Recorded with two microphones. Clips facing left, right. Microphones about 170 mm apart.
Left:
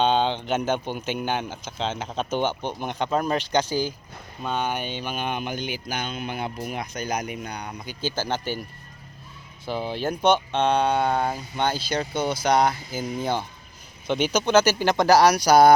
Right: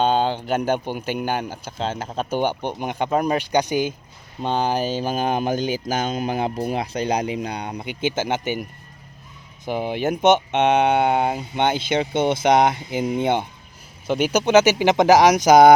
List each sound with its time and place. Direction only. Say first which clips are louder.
0.0 s speech: right 2 dB; 5° right (ahead or behind)
4.4 s speech: right 6 dB; 35° right (ahead or behind)
6.6 s speech: right 7 dB; 30° right (ahead or behind)
9.6 s speech: right 4 dB; 15° right (ahead or behind)
14.1 s speech: right 4 dB; 10° right (ahead or behind)